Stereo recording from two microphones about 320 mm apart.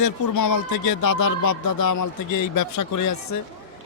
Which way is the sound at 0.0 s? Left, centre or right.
Left.